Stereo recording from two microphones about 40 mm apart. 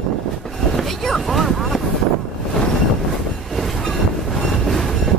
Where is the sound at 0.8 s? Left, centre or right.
Centre.